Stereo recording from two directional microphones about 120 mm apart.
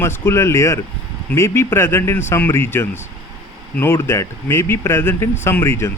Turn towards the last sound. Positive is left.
turn(degrees=20)  # may be behind; listen again after turning